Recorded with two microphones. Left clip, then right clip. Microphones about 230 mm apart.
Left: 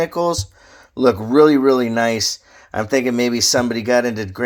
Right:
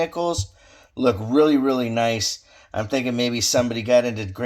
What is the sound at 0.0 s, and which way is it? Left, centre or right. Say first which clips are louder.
Speech: left 5 dB; left.